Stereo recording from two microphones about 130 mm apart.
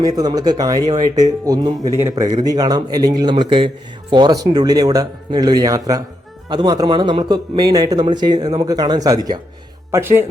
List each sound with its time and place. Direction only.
0.0 s a man's voice: 30° right (ahead or behind)
9.9 s a man's voice: 20° right (ahead or behind)